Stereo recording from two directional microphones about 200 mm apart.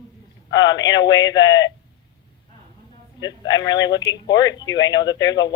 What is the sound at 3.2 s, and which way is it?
Speech, 20° left (ahead or behind).